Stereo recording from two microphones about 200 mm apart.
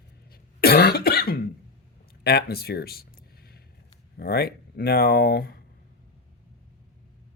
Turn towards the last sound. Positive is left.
turn(degrees=50)  # may be behind; listen again after turning